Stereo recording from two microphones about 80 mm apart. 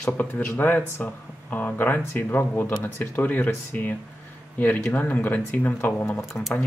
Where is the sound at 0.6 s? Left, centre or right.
Left.